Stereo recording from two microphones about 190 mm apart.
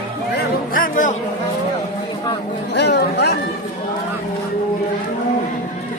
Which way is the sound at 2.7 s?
60° left (ahead or behind).